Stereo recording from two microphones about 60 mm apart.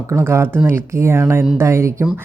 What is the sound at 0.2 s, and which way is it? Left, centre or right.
Speech, right.